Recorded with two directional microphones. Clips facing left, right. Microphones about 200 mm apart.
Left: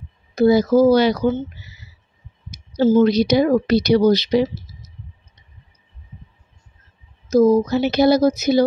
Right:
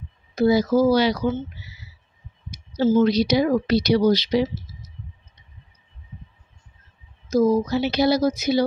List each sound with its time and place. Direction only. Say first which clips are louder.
0.4 s speech: left 4 dB; 50° left (ahead or behind)
2.8 s speech: left 3 dB; 40° left (ahead or behind)
7.2 s speech: left 5 dB; 50° left (ahead or behind)